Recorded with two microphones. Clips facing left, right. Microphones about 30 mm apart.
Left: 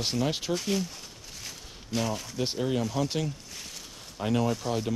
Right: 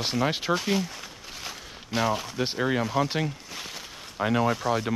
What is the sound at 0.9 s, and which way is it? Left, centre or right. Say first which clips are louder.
Speech: right 5 dB; right.